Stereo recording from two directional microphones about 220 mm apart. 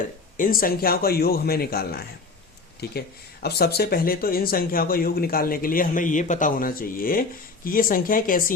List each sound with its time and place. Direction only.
0.3 s a man's voice: 40° left (ahead or behind)